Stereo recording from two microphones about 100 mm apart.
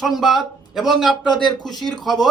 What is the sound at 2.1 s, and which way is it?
Speech, centre (ahead or behind).